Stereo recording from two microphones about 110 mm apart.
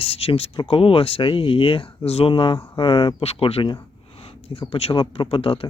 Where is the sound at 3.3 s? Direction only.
60° left (ahead or behind).